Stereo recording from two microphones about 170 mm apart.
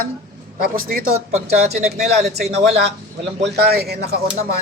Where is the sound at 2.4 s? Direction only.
40° right (ahead or behind).